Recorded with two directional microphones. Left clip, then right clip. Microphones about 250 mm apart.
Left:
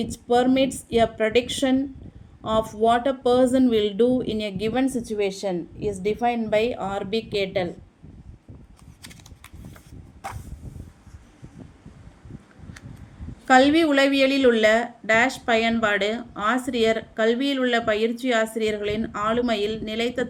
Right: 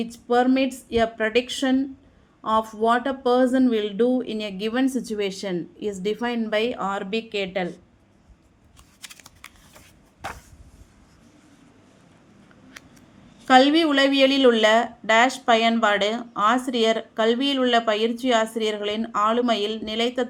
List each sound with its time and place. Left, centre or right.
0.0 s speech: centre
13.5 s a woman's voice: centre